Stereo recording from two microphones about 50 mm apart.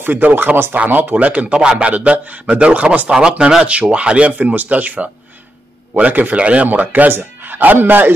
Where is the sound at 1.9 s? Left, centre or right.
Right.